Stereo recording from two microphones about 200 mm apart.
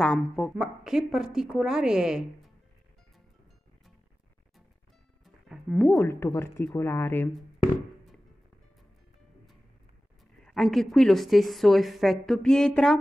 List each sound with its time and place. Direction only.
0.0 s a woman's voice: centre (ahead or behind)
5.2 s music: centre (ahead or behind)
6.0 s speech: 15° left (ahead or behind)
10.4 s a woman's voice: centre (ahead or behind)